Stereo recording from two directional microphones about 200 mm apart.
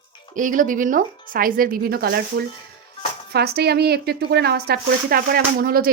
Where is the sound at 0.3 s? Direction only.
40° right (ahead or behind).